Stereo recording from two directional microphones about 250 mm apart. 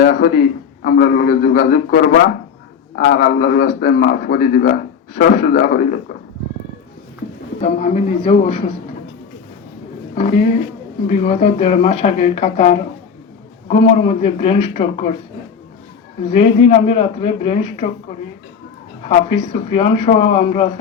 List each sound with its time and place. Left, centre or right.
0.0 s a man's voice: left
7.6 s speech: left
10.2 s speech: left
16.6 s speech: left
19.0 s speech: left